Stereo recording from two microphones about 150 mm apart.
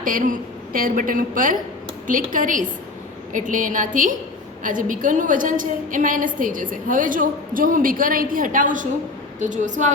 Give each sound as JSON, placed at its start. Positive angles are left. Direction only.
{"t": 0.0, "sound": "a woman's voice", "side_deg": -65}